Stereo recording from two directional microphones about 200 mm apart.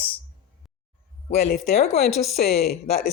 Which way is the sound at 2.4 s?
50° left (ahead or behind).